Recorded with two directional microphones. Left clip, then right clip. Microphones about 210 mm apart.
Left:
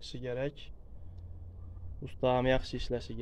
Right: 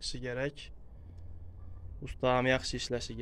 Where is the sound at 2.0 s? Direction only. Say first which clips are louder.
Even; 5° left (ahead or behind).